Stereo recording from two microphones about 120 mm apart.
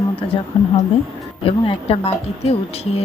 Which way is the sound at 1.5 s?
55° left (ahead or behind).